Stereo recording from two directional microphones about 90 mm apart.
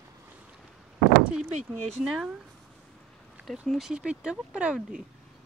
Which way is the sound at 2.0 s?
5° right (ahead or behind).